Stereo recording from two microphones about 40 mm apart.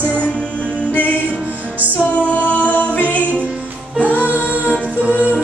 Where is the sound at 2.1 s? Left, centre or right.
Left.